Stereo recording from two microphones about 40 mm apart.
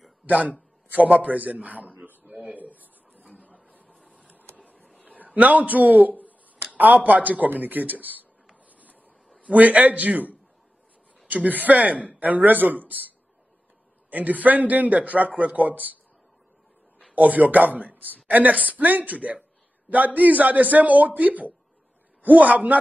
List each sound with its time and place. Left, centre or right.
0.3 s a man's voice: right
2.4 s a sound: right
3.3 s printer: right
5.2 s a sound: right
6.8 s a man's voice: right
8.6 s printer: right
9.5 s a man's voice: right
14.1 s a man's voice: right
17.1 s a woman's voice: right